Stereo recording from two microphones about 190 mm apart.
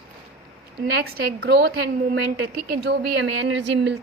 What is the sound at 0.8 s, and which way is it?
A woman's voice, 55° right (ahead or behind).